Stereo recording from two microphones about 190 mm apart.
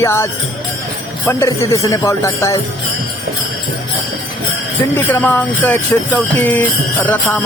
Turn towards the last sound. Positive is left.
turn(degrees=10)  # may be behind; listen again after turning